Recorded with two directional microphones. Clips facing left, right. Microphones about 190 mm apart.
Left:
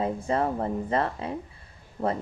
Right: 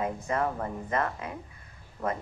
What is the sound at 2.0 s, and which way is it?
Speech, 50° left (ahead or behind).